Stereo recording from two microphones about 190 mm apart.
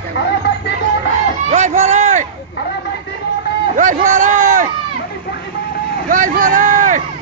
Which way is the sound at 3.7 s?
40° right (ahead or behind).